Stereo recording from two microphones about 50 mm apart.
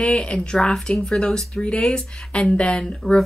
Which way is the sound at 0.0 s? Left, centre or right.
Left.